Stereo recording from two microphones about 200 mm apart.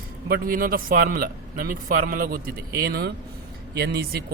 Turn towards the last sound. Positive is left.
turn(degrees=-50)  # may be behind; listen again after turning